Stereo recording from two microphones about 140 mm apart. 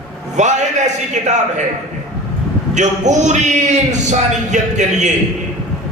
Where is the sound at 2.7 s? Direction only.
60° right (ahead or behind).